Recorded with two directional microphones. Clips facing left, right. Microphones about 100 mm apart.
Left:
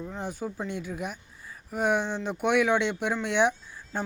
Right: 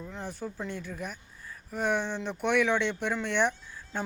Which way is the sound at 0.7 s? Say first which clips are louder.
Left 4 dB; 10° left (ahead or behind).